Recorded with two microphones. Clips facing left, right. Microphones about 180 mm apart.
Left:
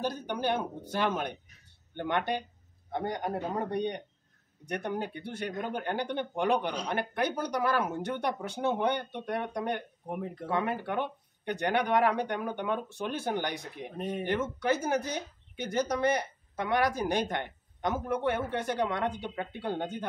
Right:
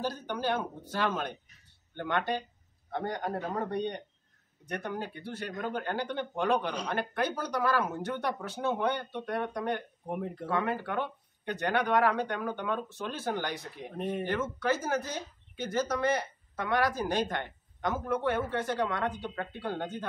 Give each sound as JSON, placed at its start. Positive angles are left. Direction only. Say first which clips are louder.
{"t": 0.0, "sound": "speech", "louder": "left 1 dB", "side_deg": 15}
{"t": 10.0, "sound": "speech", "louder": "right 1 dB", "side_deg": 0}
{"t": 10.5, "sound": "speech", "louder": "left 1 dB", "side_deg": 15}
{"t": 13.9, "sound": "speech", "louder": "right 1 dB", "side_deg": 0}
{"t": 14.2, "sound": "speech", "louder": "left 3 dB", "side_deg": 15}